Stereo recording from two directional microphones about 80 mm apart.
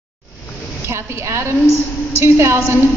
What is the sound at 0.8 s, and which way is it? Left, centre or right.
A woman's voice, right.